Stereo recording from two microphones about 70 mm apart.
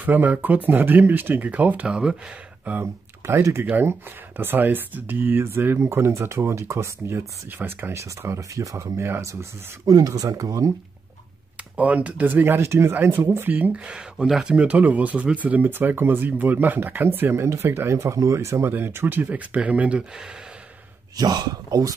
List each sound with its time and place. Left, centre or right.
0.0 s speech: right
2.6 s speech: right
3.3 s speech: right
7.9 s speech: right
9.8 s speech: right
11.7 s speech: centre; by 13.5 s right
13.5 s speech: right
17.9 s speech: right; by 20.0 s centre
21.2 s speech: right